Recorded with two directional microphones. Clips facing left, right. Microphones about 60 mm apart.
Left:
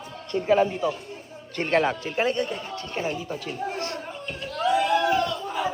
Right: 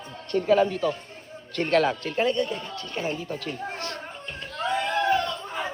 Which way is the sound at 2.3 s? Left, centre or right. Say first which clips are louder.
Even; left.